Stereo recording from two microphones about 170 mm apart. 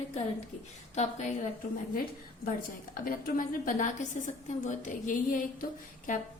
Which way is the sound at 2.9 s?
55° left (ahead or behind).